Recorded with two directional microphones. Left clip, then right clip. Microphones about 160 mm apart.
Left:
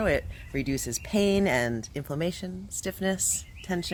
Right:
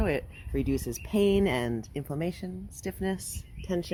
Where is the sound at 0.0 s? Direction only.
20° left (ahead or behind).